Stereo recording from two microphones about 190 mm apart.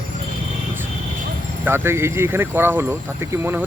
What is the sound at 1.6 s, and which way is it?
Speech, 10° right (ahead or behind).